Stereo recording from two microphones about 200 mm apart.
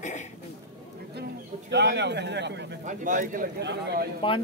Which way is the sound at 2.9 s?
40° right (ahead or behind).